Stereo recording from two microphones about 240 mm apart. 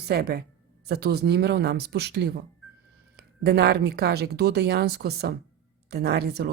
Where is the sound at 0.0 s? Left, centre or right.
Right.